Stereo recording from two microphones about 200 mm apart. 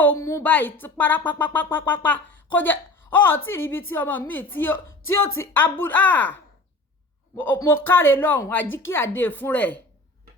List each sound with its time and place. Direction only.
0.0 s speech: 10° left (ahead or behind)